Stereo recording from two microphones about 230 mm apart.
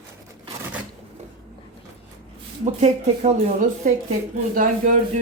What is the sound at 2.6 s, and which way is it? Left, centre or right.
Speech, right.